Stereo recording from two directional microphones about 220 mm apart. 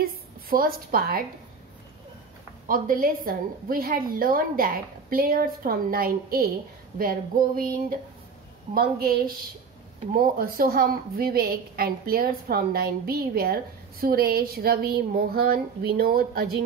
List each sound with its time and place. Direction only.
0.0 s a woman's voice: 40° right (ahead or behind)
2.7 s a woman's voice: 40° right (ahead or behind)
8.7 s a woman's voice: 25° right (ahead or behind)
10.3 s a woman's voice: 40° right (ahead or behind)